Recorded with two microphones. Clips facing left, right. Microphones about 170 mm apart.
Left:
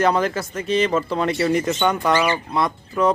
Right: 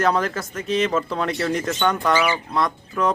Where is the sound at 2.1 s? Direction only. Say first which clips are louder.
Left 1 dB; 10° right (ahead or behind).